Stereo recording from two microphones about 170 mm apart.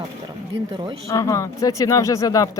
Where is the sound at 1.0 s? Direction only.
20° left (ahead or behind).